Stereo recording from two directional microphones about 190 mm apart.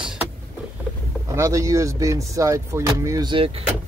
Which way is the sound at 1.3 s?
15° right (ahead or behind).